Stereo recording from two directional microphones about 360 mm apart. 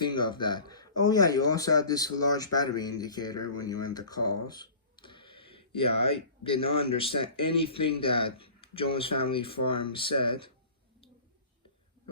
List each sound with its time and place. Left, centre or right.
0.1 s speech: centre
4.4 s a sound: centre
6.1 s speech: centre